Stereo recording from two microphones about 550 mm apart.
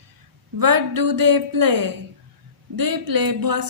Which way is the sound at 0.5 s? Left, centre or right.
Right.